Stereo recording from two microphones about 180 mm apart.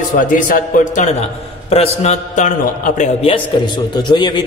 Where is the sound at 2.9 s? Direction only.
30° left (ahead or behind).